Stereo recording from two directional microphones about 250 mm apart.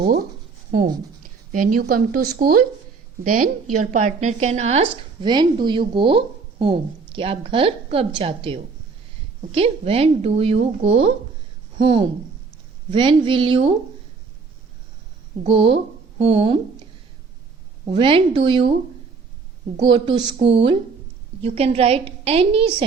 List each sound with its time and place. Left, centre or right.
0.0 s a sound: right
1.5 s a woman's voice: right
15.4 s speech: right
17.9 s a woman's voice: right
19.7 s a woman's voice: centre